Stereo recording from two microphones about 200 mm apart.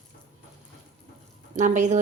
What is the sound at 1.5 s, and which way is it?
Speech, 40° right (ahead or behind).